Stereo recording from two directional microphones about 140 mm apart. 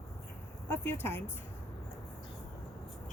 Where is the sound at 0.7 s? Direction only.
15° left (ahead or behind).